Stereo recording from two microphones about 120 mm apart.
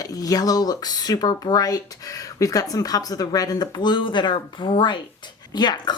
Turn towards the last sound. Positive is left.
turn(degrees=35)  # may be behind; listen again after turning